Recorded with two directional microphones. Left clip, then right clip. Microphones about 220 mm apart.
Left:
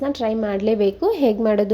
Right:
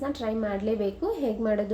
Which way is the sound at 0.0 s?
35° left (ahead or behind).